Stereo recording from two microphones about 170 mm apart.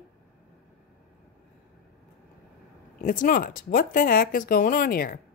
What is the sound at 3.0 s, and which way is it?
A woman's voice, 50° left (ahead or behind).